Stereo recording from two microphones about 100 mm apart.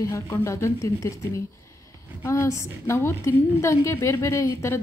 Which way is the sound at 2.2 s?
30° left (ahead or behind).